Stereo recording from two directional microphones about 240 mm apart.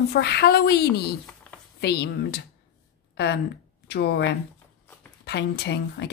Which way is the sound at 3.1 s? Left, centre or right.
Left.